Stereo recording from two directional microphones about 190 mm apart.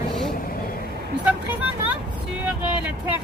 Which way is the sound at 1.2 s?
5° right (ahead or behind).